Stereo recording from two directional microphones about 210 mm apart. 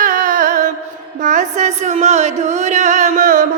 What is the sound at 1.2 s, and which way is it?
Music, 35° right (ahead or behind).